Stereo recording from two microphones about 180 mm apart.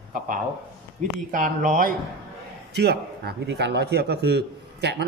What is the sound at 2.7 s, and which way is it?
A man's voice, 65° right (ahead or behind).